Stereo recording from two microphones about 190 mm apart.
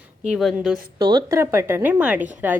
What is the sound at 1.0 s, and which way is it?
A woman's voice, 20° right (ahead or behind).